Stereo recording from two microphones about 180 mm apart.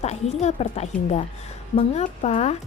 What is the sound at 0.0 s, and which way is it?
Speech, 35° left (ahead or behind).